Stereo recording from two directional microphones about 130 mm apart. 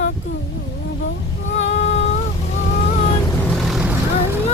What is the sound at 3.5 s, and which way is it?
Vehicle, centre (ahead or behind).